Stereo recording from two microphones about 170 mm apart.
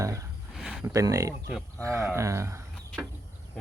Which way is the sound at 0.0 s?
20° right (ahead or behind).